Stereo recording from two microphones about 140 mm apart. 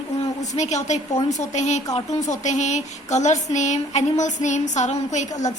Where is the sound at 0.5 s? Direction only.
55° left (ahead or behind).